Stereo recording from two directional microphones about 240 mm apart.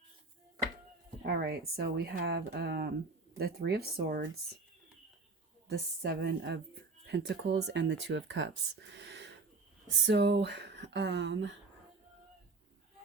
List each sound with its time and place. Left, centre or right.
1.2 s speech: right
5.6 s speech: right